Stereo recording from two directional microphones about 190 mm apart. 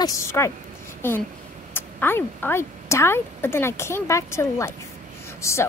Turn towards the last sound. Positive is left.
turn(degrees=15)  # may be behind; listen again after turning